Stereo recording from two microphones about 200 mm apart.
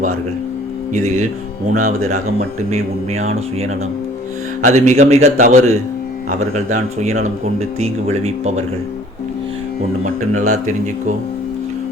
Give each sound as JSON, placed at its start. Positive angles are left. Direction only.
{"t": 0.9, "sound": "speech", "side_deg": -35}
{"t": 10.0, "sound": "speech", "side_deg": -40}